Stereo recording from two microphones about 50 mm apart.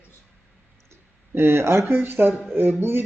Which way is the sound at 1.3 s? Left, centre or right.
Right.